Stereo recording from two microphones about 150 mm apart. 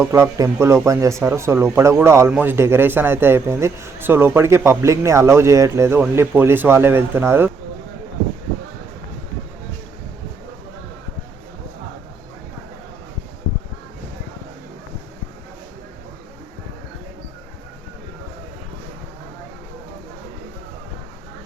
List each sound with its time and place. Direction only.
0.0 s speech: 20° right (ahead or behind)